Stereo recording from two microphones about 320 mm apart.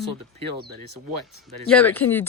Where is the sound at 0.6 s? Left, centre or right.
Right.